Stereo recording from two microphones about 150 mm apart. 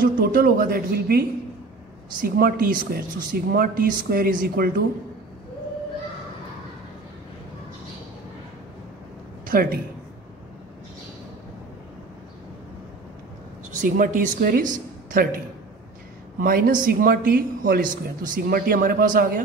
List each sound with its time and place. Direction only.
0.2 s speech: 85° right
9.5 s a man's voice: 75° right (ahead or behind)
13.7 s speech: 60° right (ahead or behind)
16.3 s speech: 75° right (ahead or behind)